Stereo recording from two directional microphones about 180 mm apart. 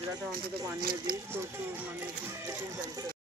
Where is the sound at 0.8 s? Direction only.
55° right (ahead or behind).